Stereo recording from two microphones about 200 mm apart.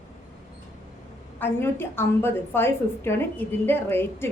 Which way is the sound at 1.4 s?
10° left (ahead or behind).